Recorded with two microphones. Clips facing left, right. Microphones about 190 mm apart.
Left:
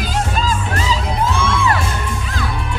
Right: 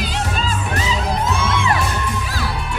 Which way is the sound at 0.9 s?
30° left (ahead or behind).